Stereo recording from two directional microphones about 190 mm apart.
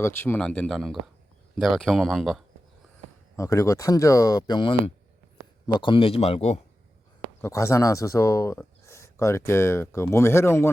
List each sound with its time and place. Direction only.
0.0 s speech: 10° left (ahead or behind)
3.3 s speech: 15° left (ahead or behind); by 6.6 s 35° left (ahead or behind)
7.4 s speech: 15° left (ahead or behind)